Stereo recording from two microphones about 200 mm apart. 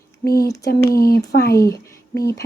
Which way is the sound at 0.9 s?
45° left (ahead or behind).